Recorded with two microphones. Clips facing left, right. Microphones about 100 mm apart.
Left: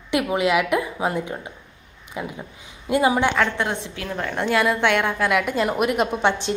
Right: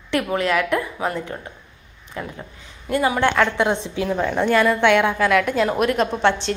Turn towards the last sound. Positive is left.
turn(degrees=10)  # may be behind; listen again after turning